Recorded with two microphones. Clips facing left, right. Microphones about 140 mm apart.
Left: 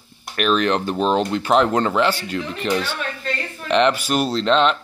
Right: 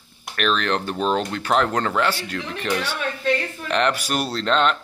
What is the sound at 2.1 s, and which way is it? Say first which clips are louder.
Speech: left 3 dB; 5° left (ahead or behind).